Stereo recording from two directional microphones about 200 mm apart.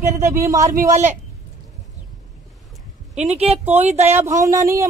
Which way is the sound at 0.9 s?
35° right (ahead or behind).